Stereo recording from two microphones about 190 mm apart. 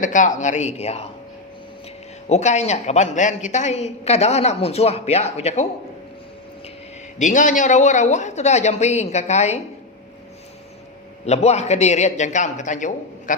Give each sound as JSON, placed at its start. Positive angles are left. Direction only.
{"t": 0.0, "sound": "a woman's voice", "side_deg": 40}
{"t": 2.3, "sound": "a woman's voice", "side_deg": 35}
{"t": 7.2, "sound": "a woman's voice", "side_deg": 40}
{"t": 11.3, "sound": "a woman's voice", "side_deg": 35}